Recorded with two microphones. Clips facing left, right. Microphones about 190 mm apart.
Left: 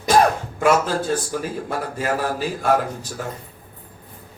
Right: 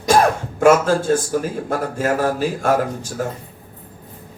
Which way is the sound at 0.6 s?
45° right (ahead or behind).